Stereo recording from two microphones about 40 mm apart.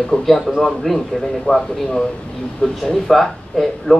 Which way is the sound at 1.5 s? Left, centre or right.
Left.